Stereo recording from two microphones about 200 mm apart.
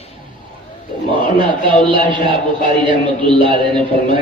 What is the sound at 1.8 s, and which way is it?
Speech, 25° right (ahead or behind).